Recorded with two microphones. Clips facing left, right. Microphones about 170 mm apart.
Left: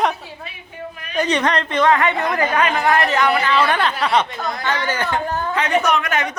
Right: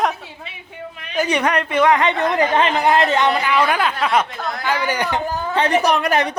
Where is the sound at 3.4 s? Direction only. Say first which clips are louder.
Even; 10° right (ahead or behind).